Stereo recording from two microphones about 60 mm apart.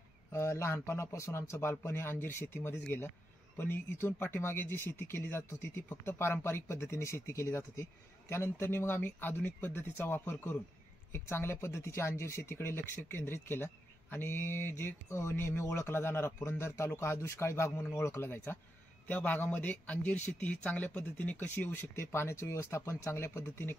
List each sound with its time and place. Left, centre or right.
0.3 s a man's voice: left